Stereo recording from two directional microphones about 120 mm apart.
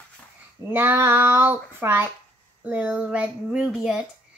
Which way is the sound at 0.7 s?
20° right (ahead or behind).